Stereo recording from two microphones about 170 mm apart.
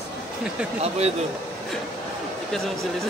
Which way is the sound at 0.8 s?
40° right (ahead or behind).